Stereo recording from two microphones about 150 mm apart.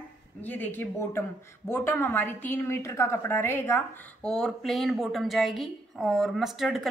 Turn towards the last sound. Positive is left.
turn(degrees=0)  # may be behind; listen again after turning